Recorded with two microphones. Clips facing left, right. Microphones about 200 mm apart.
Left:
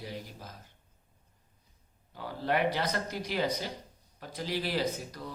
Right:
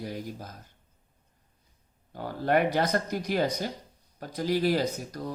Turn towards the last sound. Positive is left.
turn(degrees=-45)  # may be behind; listen again after turning